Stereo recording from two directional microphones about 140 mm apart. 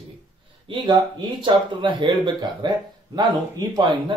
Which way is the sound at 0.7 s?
35° right (ahead or behind).